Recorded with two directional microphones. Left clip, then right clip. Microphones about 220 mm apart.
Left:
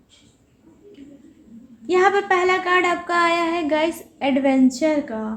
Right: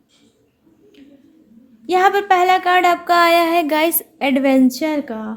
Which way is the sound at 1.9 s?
45° right (ahead or behind).